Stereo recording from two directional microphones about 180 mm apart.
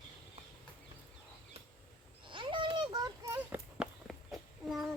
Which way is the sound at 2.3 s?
25° right (ahead or behind).